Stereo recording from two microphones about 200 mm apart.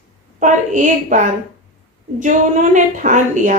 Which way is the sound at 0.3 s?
40° right (ahead or behind).